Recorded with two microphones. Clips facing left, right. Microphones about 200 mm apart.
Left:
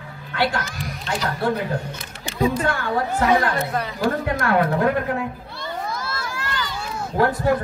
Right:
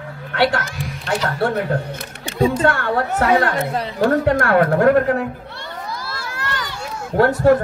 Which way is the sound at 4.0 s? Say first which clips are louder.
Right 8 dB; 50° right (ahead or behind).